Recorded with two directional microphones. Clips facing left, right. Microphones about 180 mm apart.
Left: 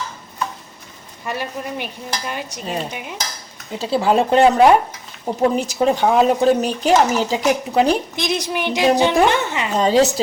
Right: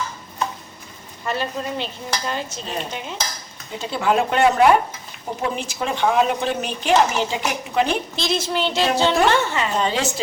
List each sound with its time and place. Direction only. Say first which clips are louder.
1.2 s dishes: right 1 dB; 15° left (ahead or behind)
3.8 s speech: left 4 dB; 35° left (ahead or behind)
8.1 s dishes: left 1 dB; 15° left (ahead or behind)
9.7 s speech: left 10 dB; 40° left (ahead or behind)